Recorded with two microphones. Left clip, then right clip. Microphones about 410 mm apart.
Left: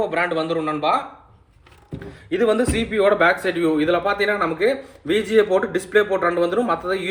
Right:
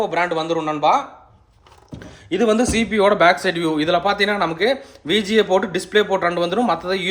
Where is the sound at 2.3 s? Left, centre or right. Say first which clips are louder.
Right 1 dB; centre.